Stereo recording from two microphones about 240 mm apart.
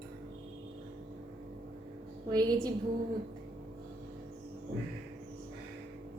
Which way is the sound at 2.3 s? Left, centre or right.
Centre.